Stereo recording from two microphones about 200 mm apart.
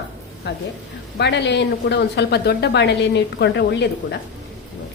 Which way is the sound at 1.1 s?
60° left (ahead or behind).